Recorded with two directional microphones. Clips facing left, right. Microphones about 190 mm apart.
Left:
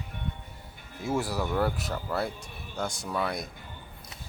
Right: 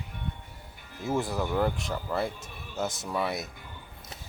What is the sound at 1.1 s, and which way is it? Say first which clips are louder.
Speech: even; centre (ahead or behind).